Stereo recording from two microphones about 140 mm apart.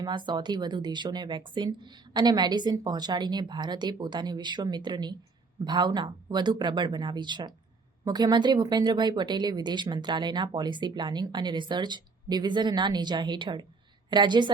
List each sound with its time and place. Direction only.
0.0 s speech: 35° right (ahead or behind)